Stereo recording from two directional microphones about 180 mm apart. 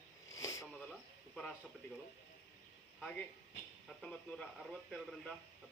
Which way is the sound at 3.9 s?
Centre (ahead or behind).